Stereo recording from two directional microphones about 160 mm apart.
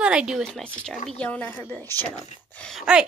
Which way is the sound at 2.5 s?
5° left (ahead or behind).